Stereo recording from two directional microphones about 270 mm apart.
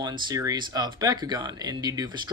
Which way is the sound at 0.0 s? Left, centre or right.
Centre.